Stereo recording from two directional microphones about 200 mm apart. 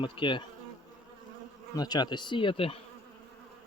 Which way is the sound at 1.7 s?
20° left (ahead or behind).